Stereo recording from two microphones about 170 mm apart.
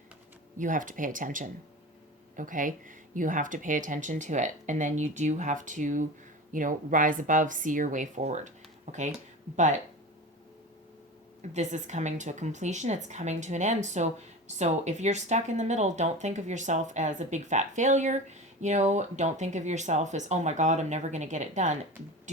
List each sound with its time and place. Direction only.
0.6 s a woman's voice: 50° right (ahead or behind)
11.5 s a woman's voice: 45° right (ahead or behind)